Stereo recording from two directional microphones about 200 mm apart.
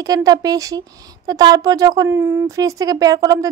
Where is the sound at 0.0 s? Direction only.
20° right (ahead or behind).